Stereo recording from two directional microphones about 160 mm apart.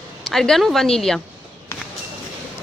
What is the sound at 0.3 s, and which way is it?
Speech, centre (ahead or behind).